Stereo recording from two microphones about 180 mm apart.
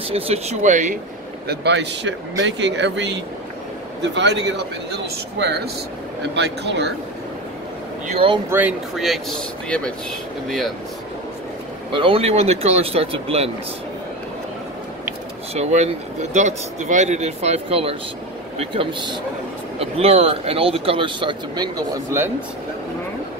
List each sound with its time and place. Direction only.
0.1 s speech: 35° right (ahead or behind)
1.5 s speech: 70° right (ahead or behind)
8.1 s speech: 30° right (ahead or behind)
8.5 s speech: 10° right (ahead or behind)
11.9 s speech: 30° right (ahead or behind)
15.5 s speech: 35° right (ahead or behind); by 22.3 s 15° right (ahead or behind)